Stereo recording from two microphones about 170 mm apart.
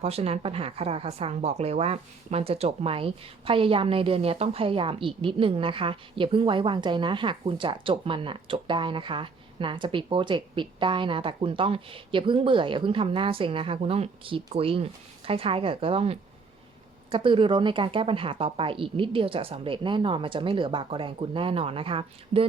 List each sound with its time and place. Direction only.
0.0 s speech: 35° right (ahead or behind)